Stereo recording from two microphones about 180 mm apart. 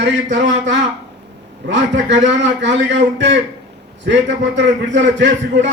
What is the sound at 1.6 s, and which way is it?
A man's voice, 75° right (ahead or behind).